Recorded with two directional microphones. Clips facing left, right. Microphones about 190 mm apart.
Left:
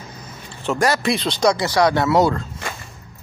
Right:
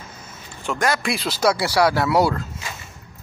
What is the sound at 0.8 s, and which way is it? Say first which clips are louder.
Speech: left 3 dB; centre (ahead or behind).